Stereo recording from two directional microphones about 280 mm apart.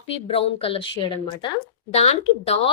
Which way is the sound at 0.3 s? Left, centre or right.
Left.